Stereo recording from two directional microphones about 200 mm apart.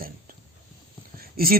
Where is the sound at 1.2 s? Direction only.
50° right (ahead or behind).